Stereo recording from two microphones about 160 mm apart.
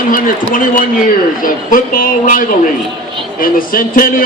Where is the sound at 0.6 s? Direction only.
60° left (ahead or behind).